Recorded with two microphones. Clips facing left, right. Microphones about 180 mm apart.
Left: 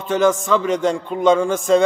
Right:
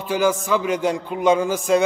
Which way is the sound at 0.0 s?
5° right (ahead or behind).